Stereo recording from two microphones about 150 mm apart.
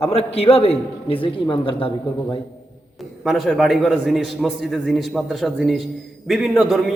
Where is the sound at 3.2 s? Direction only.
Centre (ahead or behind).